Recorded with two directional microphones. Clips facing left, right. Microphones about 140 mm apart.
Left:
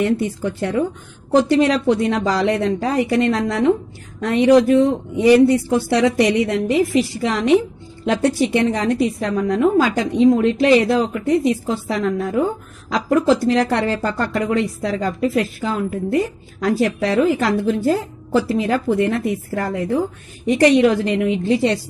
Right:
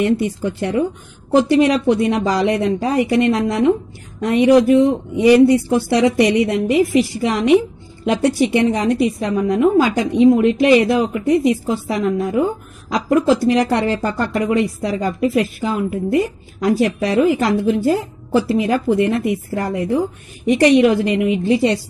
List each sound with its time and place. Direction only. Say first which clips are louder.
0.0 s a woman's voice: right 2 dB; 15° right (ahead or behind)